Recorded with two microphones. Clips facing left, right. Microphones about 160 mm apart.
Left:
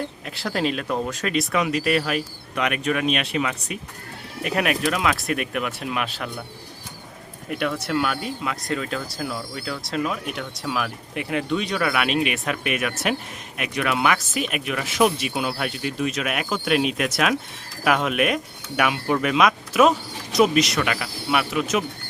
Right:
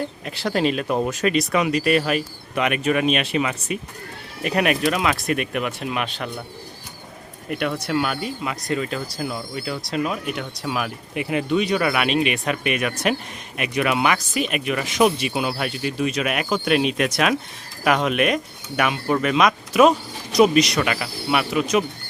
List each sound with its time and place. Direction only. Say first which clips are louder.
0.3 s speech: right 4 dB; centre (ahead or behind)
0.9 s speech: right 3 dB; 15° right (ahead or behind)
1.2 s speech: right 2 dB; centre (ahead or behind)
7.9 s speech: right 1 dB; centre (ahead or behind)